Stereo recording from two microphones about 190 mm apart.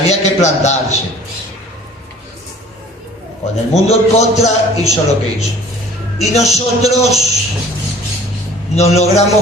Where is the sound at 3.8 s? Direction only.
35° left (ahead or behind).